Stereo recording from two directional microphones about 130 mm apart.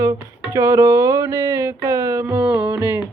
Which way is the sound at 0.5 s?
25° right (ahead or behind).